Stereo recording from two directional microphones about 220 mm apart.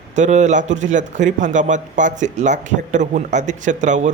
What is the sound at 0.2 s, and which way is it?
A man's voice, 35° right (ahead or behind).